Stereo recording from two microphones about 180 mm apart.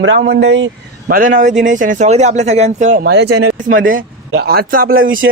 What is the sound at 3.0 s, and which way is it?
A man's voice, 70° right (ahead or behind).